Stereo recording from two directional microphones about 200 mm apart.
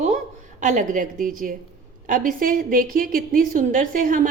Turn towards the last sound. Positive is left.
turn(degrees=-40)  # may be behind; listen again after turning